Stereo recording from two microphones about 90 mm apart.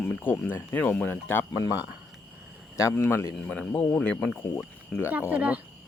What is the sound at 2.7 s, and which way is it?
Speech, 30° left (ahead or behind).